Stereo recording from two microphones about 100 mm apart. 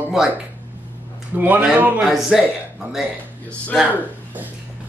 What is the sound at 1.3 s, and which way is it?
Speech, 15° right (ahead or behind).